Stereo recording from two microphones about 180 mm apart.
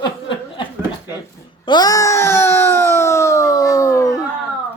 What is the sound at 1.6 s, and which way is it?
Wail, 20° left (ahead or behind).